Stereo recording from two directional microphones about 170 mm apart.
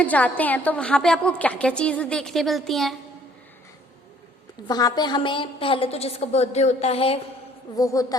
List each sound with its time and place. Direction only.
0.0 s a woman's voice: 10° left (ahead or behind)
4.7 s a woman's voice: 25° left (ahead or behind)
7.8 s a woman's voice: 20° left (ahead or behind)